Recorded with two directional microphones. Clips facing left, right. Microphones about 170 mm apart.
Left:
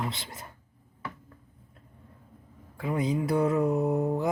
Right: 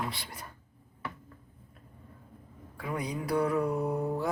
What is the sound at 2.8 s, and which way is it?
Speech, 25° left (ahead or behind).